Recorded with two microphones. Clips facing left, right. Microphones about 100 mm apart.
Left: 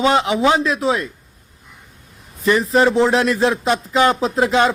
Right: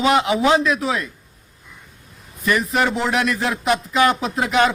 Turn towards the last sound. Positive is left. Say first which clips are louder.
# left 2 dB
turn(degrees=25)  # may be behind; listen again after turning